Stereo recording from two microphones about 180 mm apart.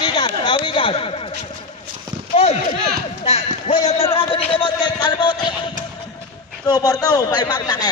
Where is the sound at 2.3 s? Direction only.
35° left (ahead or behind).